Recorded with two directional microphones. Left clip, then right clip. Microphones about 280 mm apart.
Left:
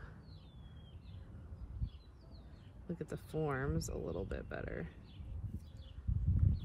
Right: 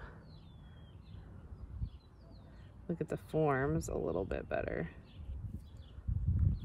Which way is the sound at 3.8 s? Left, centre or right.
Right.